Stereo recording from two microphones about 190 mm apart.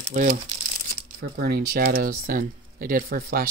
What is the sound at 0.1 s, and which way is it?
Speech, 45° right (ahead or behind).